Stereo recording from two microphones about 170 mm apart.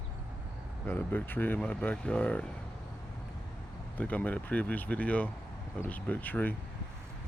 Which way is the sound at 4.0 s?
10° left (ahead or behind).